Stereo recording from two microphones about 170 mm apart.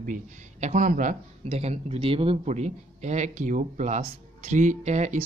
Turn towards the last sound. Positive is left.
turn(degrees=-40)  # may be behind; listen again after turning